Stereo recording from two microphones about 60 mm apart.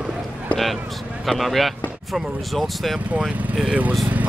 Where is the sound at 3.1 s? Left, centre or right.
Right.